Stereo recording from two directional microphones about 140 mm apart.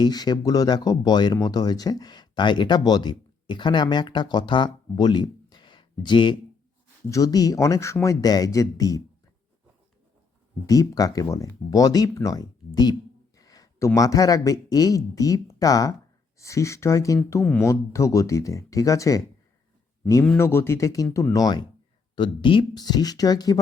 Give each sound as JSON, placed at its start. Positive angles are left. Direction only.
{"t": 0.0, "sound": "speech", "side_deg": 30}
{"t": 10.7, "sound": "speech", "side_deg": 25}
{"t": 20.3, "sound": "speech", "side_deg": 15}